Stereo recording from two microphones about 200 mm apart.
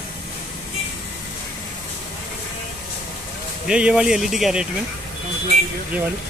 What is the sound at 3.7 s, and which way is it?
Speech, 5° right (ahead or behind).